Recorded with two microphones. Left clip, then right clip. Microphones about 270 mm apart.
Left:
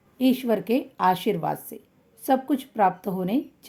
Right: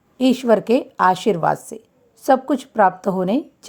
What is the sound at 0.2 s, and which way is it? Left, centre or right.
A woman's voice, right.